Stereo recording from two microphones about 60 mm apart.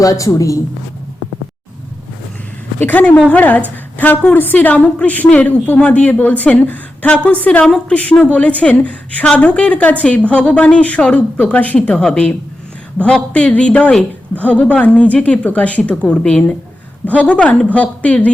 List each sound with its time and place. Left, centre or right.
0.0 s a woman's voice: left
2.7 s a woman's voice: left
7.6 s a woman's voice: centre
8.2 s a woman's voice: left